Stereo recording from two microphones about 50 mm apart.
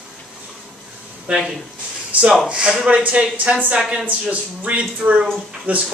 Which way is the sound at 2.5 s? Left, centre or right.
Right.